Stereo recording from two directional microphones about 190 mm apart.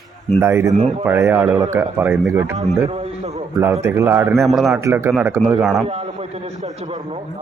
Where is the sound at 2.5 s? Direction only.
35° right (ahead or behind).